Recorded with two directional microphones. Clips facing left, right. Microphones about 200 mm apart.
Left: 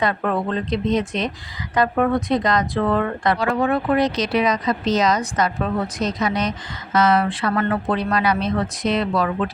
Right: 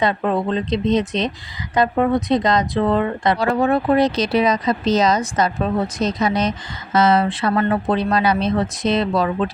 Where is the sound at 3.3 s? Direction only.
35° right (ahead or behind).